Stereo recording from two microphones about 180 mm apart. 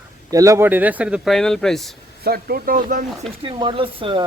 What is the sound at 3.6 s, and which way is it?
Speech, 30° right (ahead or behind).